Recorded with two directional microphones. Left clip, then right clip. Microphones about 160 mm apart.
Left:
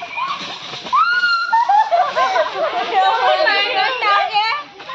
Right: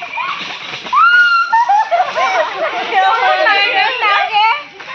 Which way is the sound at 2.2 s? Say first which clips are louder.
Right 2 dB; 10° left (ahead or behind).